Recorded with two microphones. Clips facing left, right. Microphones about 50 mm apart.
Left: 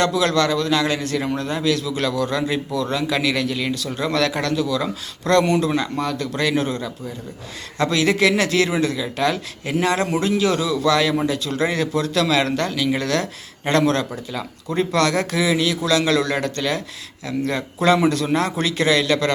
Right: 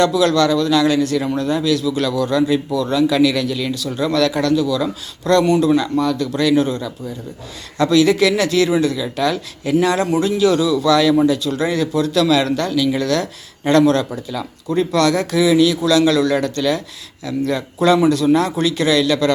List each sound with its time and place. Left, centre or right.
0.0 s a man's voice: left